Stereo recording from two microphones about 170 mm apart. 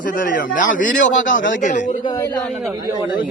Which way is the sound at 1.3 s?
90° left.